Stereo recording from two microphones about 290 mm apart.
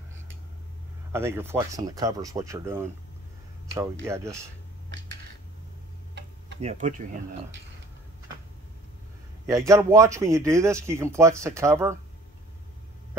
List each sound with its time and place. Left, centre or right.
1.1 s speech: centre
4.0 s speech: centre
6.6 s speech: right
9.5 s speech: centre